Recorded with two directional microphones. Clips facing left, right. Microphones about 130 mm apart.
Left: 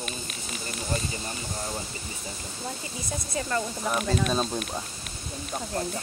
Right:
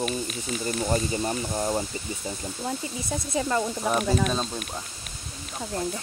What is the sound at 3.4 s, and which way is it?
Speech, 15° right (ahead or behind).